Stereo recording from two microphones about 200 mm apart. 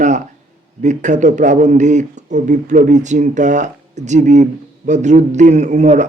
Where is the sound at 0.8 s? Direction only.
35° right (ahead or behind).